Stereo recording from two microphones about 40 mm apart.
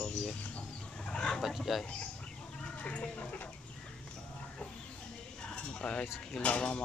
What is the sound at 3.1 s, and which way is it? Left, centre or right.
Chicken, left.